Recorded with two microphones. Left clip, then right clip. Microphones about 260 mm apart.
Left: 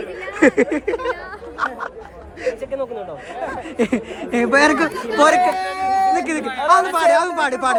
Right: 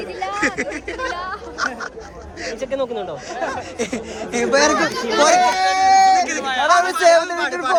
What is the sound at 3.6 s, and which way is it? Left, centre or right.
Speech, left.